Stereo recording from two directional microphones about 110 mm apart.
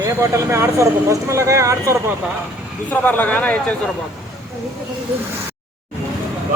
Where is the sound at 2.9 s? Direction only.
15° left (ahead or behind).